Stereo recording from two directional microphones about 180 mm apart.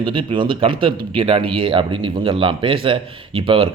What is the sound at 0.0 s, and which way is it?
Speech, 25° right (ahead or behind).